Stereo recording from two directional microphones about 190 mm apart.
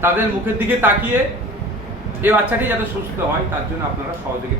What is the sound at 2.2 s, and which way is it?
Speech, 10° right (ahead or behind).